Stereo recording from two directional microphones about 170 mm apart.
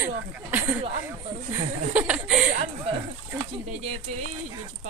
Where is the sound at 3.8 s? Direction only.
40° right (ahead or behind).